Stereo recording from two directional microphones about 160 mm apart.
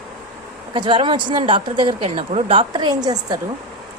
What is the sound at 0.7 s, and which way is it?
Speech, 30° right (ahead or behind).